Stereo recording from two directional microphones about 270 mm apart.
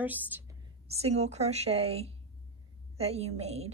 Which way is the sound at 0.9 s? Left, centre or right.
Right.